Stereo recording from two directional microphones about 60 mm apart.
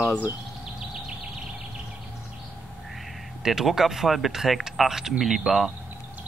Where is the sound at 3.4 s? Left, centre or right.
Centre.